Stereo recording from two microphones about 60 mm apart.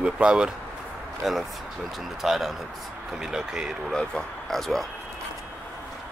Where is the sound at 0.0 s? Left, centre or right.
Centre.